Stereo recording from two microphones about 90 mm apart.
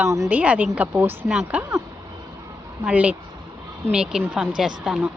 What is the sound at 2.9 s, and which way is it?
Speech, 15° right (ahead or behind).